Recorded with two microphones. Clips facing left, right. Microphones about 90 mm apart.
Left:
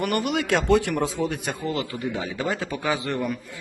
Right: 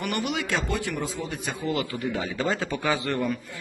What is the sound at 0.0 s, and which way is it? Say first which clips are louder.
Speech: left 4 dB; 45° left (ahead or behind).